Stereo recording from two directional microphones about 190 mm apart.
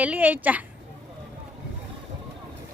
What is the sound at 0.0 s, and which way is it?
Speech, 10° right (ahead or behind).